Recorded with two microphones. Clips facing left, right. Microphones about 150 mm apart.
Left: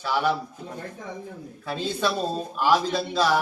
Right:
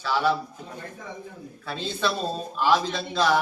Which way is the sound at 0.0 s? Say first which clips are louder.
Even; 15° left (ahead or behind).